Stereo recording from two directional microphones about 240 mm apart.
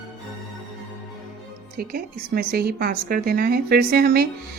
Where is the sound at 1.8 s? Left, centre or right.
Right.